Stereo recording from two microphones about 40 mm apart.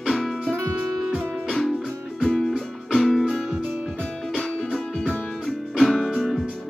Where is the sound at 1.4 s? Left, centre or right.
Centre.